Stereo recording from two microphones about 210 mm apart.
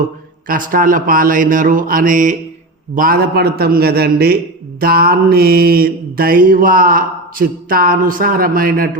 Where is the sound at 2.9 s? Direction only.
40° right (ahead or behind).